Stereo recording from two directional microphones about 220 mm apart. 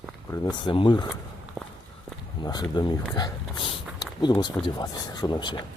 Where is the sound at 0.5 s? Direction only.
20° left (ahead or behind).